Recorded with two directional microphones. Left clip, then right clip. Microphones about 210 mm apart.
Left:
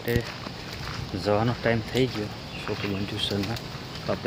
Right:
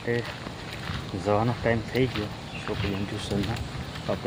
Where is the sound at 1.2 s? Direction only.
10° left (ahead or behind).